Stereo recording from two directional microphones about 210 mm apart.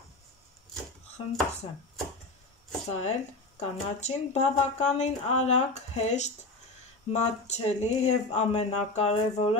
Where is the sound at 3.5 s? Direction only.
30° left (ahead or behind).